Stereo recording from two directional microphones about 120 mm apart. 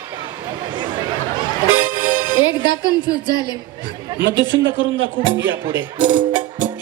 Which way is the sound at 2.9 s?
35° left (ahead or behind).